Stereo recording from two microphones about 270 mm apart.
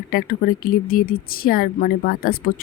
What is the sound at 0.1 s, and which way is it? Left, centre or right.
A woman's voice, left.